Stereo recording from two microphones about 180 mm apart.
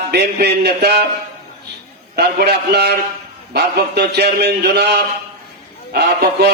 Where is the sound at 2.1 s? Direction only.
65° right (ahead or behind).